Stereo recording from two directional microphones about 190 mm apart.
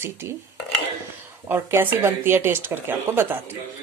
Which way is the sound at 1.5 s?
10° right (ahead or behind).